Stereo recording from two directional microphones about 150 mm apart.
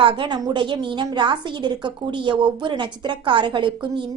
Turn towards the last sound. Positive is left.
turn(degrees=-30)  # may be behind; listen again after turning